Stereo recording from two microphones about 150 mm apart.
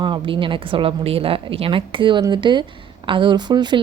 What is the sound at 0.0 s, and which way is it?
Speech, 35° right (ahead or behind).